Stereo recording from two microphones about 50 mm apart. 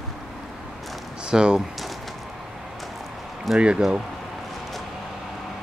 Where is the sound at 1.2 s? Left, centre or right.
Centre.